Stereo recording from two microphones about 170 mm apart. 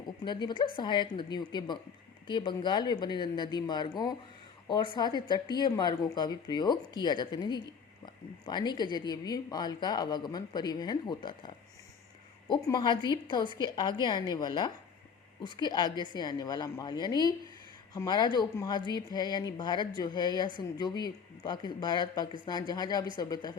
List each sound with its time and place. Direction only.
0.3 s speech: 25° left (ahead or behind)